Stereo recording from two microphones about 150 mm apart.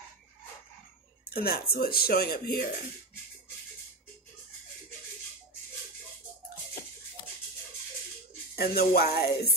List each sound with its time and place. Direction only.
1.3 s speech: 90° left
8.5 s speech: 90° left